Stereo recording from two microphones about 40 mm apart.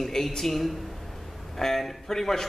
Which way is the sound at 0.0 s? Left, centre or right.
Centre.